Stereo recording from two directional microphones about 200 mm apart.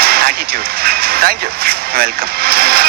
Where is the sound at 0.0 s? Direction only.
50° right (ahead or behind).